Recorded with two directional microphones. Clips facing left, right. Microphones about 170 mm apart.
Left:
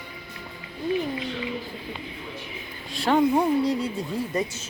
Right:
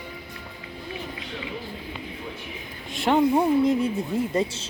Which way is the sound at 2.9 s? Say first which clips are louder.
Even; 20° right (ahead or behind).